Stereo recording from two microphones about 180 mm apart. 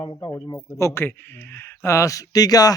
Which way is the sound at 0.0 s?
20° left (ahead or behind).